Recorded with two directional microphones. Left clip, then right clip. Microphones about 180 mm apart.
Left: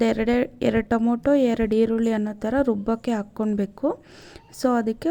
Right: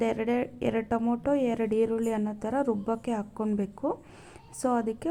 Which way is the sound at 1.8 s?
45° left (ahead or behind).